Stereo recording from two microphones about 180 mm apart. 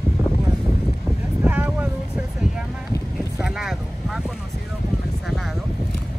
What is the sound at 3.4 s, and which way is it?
Vehicle, 5° right (ahead or behind).